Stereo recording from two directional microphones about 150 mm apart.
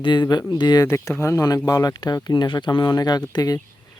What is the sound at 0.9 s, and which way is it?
Speech, 15° left (ahead or behind).